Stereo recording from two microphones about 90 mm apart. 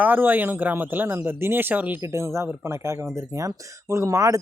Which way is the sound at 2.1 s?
35° right (ahead or behind).